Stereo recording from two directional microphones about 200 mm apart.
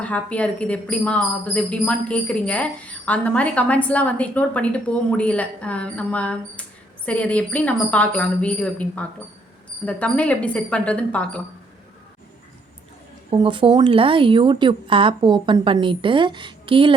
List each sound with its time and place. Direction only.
0.0 s speech: 5° left (ahead or behind)
13.3 s speech: 25° right (ahead or behind)